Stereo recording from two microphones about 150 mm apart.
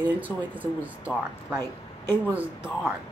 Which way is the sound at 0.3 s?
15° left (ahead or behind).